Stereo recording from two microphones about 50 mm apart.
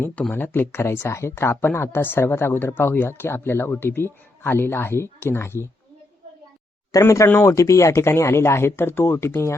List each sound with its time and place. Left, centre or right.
0.2 s speech: left
7.0 s speech: left
7.3 s speech: left